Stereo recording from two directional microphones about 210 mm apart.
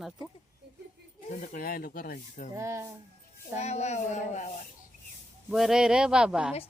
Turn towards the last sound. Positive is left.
turn(degrees=-5)  # may be behind; listen again after turning